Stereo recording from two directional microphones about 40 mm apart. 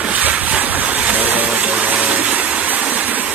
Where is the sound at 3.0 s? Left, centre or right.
Right.